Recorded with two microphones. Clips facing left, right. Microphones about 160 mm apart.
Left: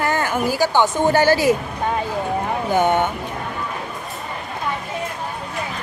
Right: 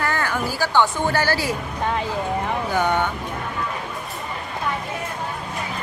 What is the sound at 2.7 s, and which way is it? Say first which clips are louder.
Speech: left 5 dB; 20° left (ahead or behind).